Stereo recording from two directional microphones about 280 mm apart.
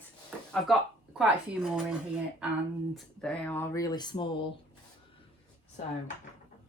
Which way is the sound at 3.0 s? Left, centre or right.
Centre.